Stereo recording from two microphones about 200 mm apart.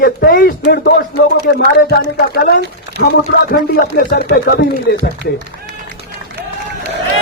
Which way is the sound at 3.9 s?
50° left (ahead or behind).